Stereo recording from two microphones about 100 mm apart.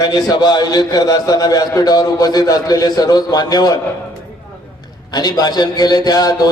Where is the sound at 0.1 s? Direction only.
45° left (ahead or behind).